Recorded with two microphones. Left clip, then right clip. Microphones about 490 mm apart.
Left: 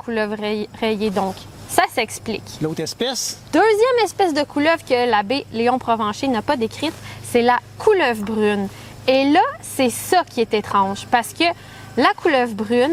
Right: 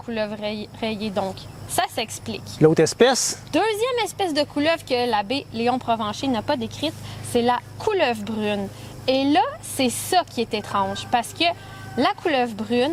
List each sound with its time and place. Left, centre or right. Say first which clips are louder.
0.1 s speech: left 5 dB; left
2.6 s speech: right 10 dB; right
3.5 s speech: left 7 dB; left